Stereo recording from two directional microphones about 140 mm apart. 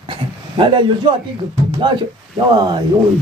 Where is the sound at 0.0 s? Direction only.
35° right (ahead or behind).